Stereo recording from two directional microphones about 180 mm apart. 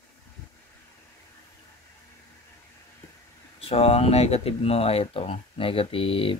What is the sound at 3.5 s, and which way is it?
Speech, 35° left (ahead or behind).